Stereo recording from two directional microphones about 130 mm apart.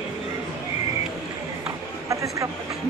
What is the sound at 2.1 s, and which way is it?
Speech, 25° right (ahead or behind).